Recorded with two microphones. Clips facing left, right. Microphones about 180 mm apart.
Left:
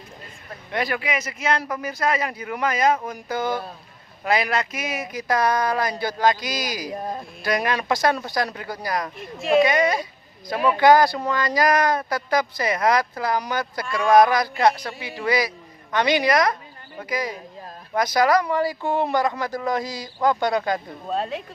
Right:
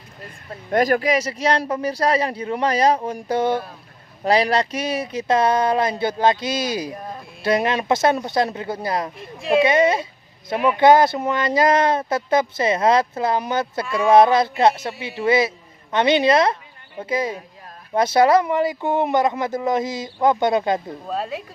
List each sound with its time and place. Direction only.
0.7 s speech: 45° right (ahead or behind); by 9.1 s 25° right (ahead or behind)
9.1 s speech: centre (ahead or behind)
9.6 s speech: 25° right (ahead or behind)
21.1 s speech: 5° right (ahead or behind)